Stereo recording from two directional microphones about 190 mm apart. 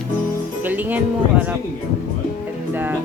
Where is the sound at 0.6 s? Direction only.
10° right (ahead or behind).